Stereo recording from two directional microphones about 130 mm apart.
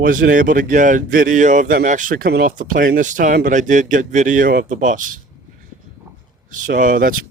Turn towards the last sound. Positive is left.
turn(degrees=-90)